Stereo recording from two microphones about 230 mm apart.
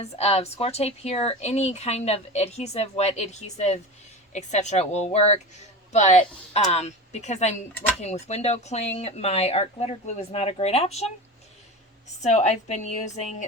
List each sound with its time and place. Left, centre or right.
0.0 s speech: left
12.2 s a woman's voice: left